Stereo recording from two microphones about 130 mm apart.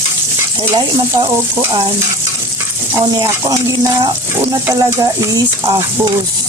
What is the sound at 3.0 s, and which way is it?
Speech, 30° right (ahead or behind).